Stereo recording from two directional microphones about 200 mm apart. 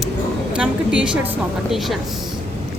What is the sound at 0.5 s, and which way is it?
Speech, 5° right (ahead or behind).